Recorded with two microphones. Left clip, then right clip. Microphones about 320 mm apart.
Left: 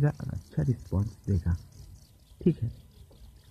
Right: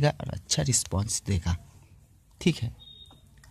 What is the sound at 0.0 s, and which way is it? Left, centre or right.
Speech, centre.